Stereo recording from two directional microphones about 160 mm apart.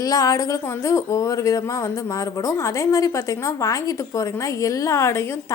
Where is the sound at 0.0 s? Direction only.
20° left (ahead or behind).